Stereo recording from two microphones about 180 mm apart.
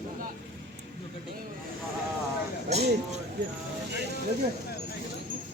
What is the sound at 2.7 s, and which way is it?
Speech, 35° right (ahead or behind).